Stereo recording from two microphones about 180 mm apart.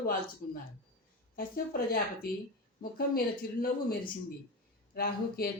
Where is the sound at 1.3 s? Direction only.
55° left (ahead or behind).